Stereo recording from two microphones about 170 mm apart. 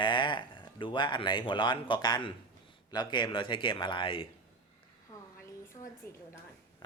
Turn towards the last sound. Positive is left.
turn(degrees=25)  # may be behind; listen again after turning